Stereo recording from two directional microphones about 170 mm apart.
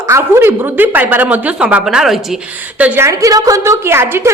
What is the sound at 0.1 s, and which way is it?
A man's voice, 15° right (ahead or behind).